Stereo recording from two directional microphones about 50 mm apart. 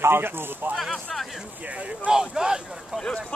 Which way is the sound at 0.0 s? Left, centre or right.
Right.